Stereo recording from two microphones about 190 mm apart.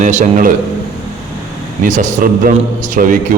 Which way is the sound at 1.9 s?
40° right (ahead or behind).